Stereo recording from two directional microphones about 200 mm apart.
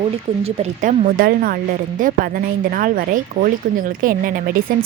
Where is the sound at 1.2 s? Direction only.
45° right (ahead or behind).